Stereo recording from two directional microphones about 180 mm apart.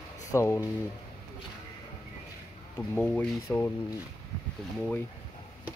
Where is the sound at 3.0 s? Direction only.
10° left (ahead or behind).